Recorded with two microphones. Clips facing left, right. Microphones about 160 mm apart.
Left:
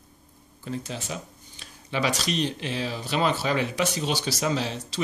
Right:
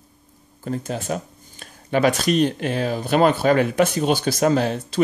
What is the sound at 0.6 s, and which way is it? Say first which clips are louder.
Speech: right 6 dB; 50° right (ahead or behind).